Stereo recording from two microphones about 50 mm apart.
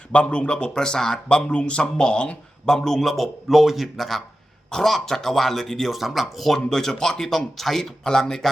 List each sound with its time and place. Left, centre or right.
0.1 s speech: left
2.6 s speech: centre